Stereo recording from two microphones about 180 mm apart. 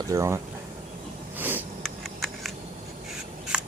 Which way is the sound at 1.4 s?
10° right (ahead or behind).